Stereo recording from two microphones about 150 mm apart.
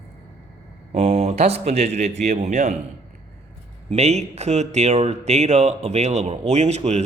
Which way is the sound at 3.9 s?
45° right (ahead or behind).